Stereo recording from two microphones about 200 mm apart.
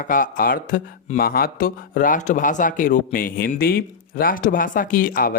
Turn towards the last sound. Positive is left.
turn(degrees=45)  # may be behind; listen again after turning